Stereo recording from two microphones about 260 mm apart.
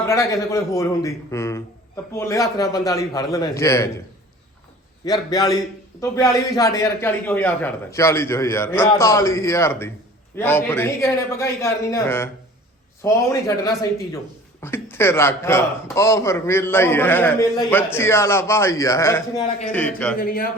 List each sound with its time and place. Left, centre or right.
0.0 s a man's voice: centre
5.0 s a man's voice: centre
20.1 s speech: left